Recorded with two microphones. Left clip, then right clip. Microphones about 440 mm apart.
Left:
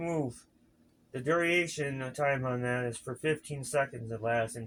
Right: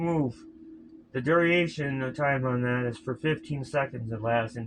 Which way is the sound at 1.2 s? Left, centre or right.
Left.